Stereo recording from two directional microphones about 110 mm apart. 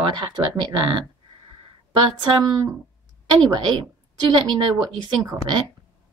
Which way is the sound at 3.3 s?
40° right (ahead or behind).